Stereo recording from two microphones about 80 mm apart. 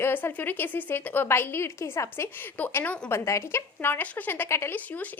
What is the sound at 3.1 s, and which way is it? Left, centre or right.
Speech, left.